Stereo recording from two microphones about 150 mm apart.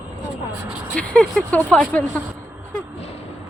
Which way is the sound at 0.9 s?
5° left (ahead or behind).